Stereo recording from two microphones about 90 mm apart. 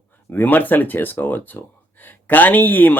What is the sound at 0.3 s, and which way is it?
Speech, 20° left (ahead or behind).